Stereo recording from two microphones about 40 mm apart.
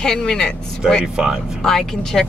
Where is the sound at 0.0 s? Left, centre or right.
Centre.